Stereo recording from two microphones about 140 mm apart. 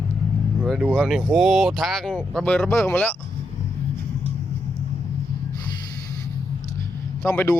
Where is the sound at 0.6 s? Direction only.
Centre (ahead or behind).